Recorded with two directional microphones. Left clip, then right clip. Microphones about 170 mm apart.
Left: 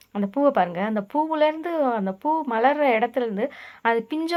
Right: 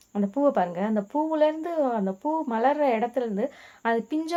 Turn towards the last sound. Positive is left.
turn(degrees=20)  # may be behind; listen again after turning